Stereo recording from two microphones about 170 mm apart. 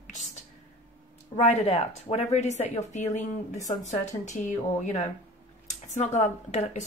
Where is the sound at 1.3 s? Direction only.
40° left (ahead or behind).